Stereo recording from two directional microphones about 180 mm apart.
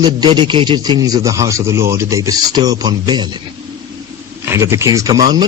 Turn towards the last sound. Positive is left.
turn(degrees=-20)  # may be behind; listen again after turning